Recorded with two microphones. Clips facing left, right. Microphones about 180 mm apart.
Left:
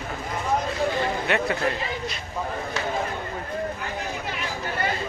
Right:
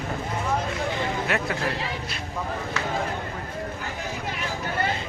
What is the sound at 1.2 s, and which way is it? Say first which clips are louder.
Speech: left 2 dB; centre (ahead or behind).